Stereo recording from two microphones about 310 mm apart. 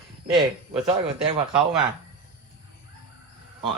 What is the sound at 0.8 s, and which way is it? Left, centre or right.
Speech, centre.